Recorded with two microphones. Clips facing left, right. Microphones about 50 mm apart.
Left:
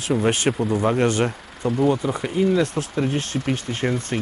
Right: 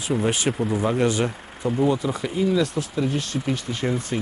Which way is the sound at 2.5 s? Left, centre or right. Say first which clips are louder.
Left 2 dB; left.